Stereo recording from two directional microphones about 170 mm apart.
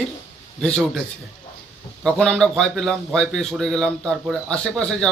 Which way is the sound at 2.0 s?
5° left (ahead or behind).